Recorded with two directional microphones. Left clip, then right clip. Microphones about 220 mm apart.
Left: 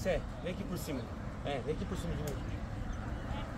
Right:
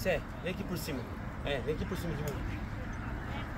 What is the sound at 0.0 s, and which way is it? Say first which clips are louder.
Speech: right 2 dB; 40° right (ahead or behind).